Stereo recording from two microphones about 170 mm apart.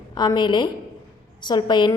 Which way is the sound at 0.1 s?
25° left (ahead or behind).